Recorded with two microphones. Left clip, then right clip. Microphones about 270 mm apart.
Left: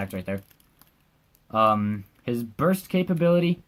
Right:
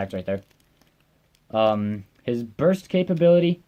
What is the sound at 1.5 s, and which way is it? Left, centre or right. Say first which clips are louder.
Speech: even; centre.